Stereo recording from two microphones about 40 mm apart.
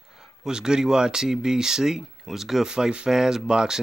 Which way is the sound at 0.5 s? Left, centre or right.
Centre.